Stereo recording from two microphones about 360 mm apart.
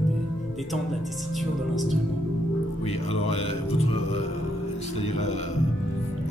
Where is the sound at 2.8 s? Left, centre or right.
Centre.